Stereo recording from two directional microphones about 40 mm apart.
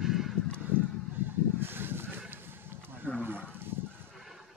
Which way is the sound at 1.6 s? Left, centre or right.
Right.